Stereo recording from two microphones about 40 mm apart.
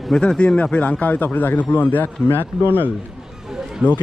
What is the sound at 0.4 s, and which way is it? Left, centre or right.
A man's voice, left.